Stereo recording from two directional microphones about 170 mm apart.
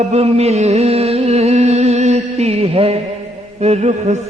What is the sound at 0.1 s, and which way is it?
Music, 40° right (ahead or behind).